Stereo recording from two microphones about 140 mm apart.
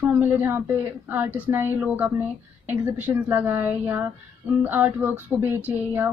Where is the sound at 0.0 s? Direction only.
15° right (ahead or behind).